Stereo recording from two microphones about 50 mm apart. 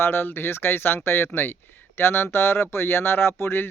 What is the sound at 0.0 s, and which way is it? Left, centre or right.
Speech, left.